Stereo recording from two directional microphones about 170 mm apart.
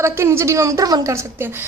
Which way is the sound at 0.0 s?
15° right (ahead or behind).